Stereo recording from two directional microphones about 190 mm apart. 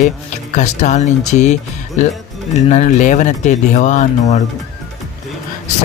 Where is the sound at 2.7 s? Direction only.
40° left (ahead or behind).